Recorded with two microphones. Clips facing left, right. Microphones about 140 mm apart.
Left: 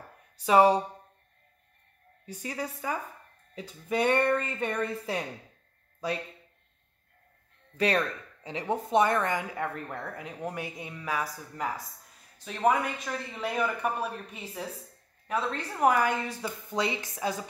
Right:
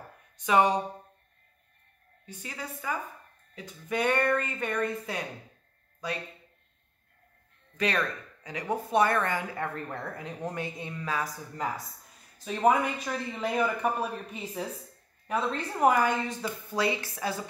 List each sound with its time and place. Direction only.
0.4 s speech: 35° left (ahead or behind)
2.2 s speech: 35° left (ahead or behind)
7.7 s speech: 35° left (ahead or behind); by 11.6 s 10° left (ahead or behind)
12.4 s speech: 5° right (ahead or behind)
16.7 s speech: 20° left (ahead or behind)